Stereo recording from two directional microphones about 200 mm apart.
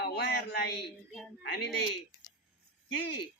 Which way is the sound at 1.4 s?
55° left (ahead or behind).